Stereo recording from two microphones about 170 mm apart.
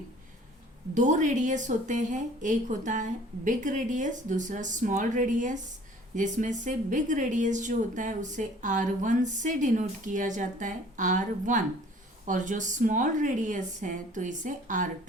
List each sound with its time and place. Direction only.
0.9 s a woman's voice: 45° right (ahead or behind)